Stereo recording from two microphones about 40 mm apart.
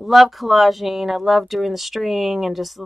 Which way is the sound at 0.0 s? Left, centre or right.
Centre.